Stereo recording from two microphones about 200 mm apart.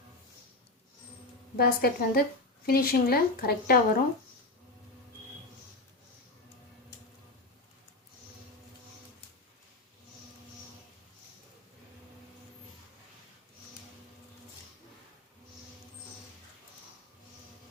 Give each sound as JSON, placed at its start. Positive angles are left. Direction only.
{"t": 1.5, "sound": "a woman's voice", "side_deg": 50}